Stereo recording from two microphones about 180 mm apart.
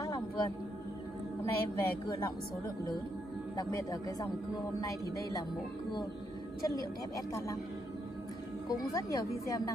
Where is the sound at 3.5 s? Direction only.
20° left (ahead or behind).